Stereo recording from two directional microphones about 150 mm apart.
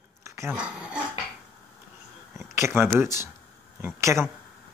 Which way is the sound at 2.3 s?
15° right (ahead or behind).